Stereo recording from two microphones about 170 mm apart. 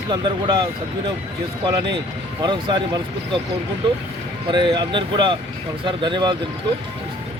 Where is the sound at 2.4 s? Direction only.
25° right (ahead or behind).